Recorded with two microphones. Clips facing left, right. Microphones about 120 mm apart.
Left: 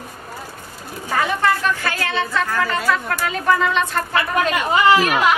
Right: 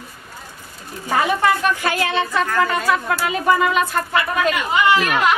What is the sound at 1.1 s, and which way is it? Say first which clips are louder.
Speech: right 2 dB; 15° right (ahead or behind).